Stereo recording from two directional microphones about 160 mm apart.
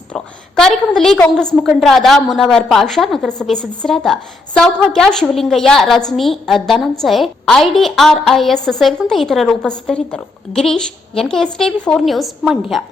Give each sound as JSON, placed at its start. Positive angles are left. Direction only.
{"t": 0.1, "sound": "a woman's voice", "side_deg": 5}